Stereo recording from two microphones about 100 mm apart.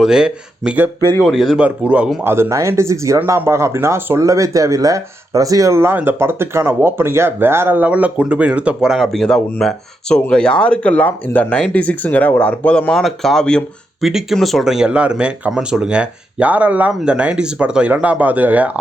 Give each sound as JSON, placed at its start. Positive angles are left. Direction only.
{"t": 0.0, "sound": "speech", "side_deg": -5}
{"t": 1.6, "sound": "speech", "side_deg": -15}
{"t": 2.2, "sound": "speech", "side_deg": -25}
{"t": 14.0, "sound": "speech", "side_deg": -5}